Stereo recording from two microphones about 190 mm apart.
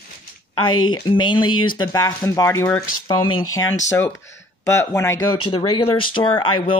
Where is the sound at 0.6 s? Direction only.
90° left.